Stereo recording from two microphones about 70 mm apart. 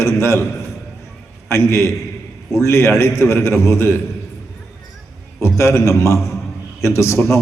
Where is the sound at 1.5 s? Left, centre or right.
Left.